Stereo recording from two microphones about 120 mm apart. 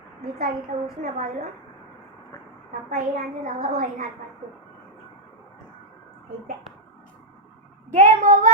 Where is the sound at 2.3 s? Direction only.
20° left (ahead or behind).